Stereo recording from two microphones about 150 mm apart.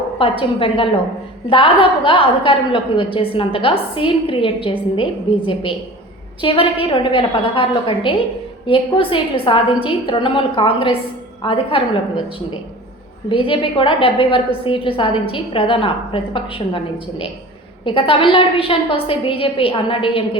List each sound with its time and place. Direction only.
0.2 s a woman's voice: 35° left (ahead or behind)
6.4 s a woman's voice: 35° left (ahead or behind)
13.2 s a woman's voice: 35° left (ahead or behind)